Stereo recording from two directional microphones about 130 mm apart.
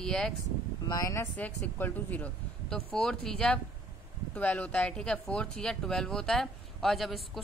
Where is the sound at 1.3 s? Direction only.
10° left (ahead or behind).